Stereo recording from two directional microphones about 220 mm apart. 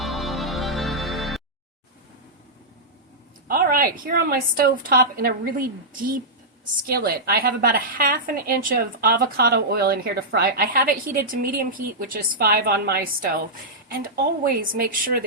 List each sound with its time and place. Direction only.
0.0 s music: centre (ahead or behind)
3.5 s a woman's voice: 40° right (ahead or behind)